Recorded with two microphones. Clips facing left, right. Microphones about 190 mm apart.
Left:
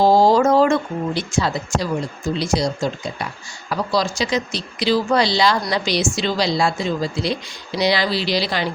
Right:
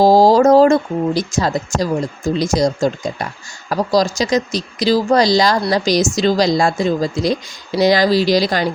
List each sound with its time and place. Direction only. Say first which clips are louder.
0.0 s speech: right 4 dB; 40° right (ahead or behind)